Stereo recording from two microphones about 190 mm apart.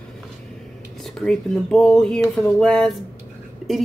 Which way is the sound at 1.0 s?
Centre (ahead or behind).